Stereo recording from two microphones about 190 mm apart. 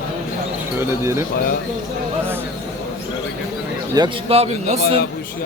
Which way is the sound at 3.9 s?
25° right (ahead or behind).